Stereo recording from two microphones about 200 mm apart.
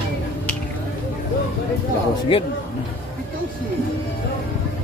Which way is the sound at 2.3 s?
25° left (ahead or behind).